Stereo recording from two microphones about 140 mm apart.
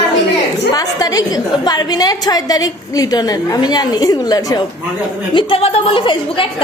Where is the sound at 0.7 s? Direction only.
25° left (ahead or behind).